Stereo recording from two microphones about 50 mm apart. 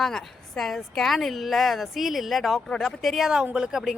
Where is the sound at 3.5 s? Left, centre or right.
Centre.